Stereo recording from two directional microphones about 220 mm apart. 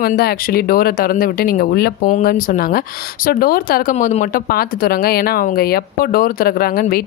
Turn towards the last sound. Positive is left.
turn(degrees=40)  # may be behind; listen again after turning